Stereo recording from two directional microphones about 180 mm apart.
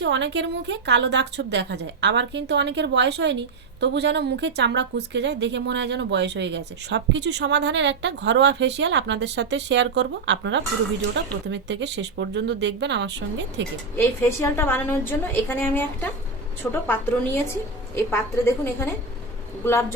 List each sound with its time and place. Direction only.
0.0 s a woman's voice: 90° right
13.9 s a woman's voice: 15° left (ahead or behind)